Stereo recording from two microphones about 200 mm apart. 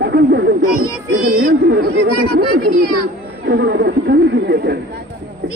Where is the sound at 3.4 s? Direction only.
55° right (ahead or behind).